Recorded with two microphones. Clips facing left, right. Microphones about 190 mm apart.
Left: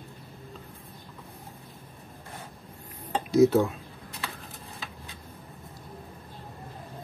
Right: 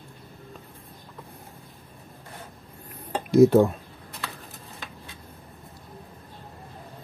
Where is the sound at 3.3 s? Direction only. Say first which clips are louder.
Right 4 dB; 55° right (ahead or behind).